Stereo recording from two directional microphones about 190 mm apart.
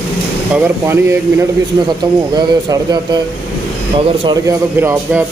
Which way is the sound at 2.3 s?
20° right (ahead or behind).